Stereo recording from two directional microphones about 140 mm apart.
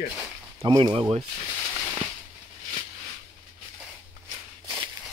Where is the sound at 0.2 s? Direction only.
20° right (ahead or behind).